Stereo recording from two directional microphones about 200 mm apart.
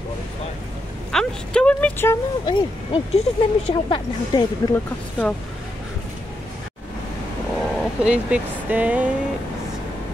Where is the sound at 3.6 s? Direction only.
25° left (ahead or behind).